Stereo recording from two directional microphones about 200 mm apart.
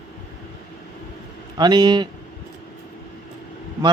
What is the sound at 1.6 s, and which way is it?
Speech, 20° right (ahead or behind).